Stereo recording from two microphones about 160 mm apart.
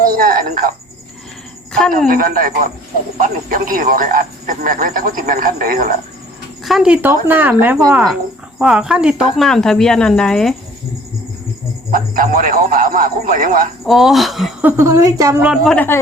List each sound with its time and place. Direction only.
0.0 s speech: 60° right (ahead or behind)
1.9 s speech: 65° right (ahead or behind)
6.7 s speech: 5° right (ahead or behind)
8.5 s speech: 5° right (ahead or behind)
11.9 s speech: 60° right (ahead or behind)
13.8 s speech: centre (ahead or behind)
14.6 s speech: 15° right (ahead or behind)
15.4 s speech: 5° left (ahead or behind)